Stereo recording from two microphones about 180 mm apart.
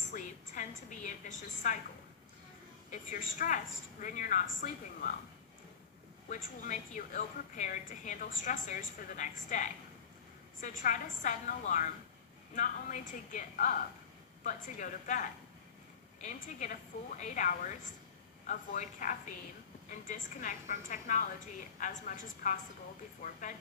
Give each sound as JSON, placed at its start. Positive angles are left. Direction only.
{"t": 0.1, "sound": "a woman's voice", "side_deg": 45}
{"t": 2.9, "sound": "a woman's voice", "side_deg": 45}
{"t": 6.2, "sound": "a woman's voice", "side_deg": 45}